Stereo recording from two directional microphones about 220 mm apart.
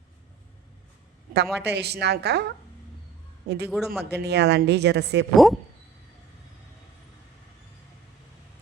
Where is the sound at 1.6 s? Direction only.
50° right (ahead or behind).